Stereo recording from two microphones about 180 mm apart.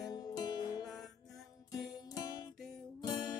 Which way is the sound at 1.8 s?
20° left (ahead or behind).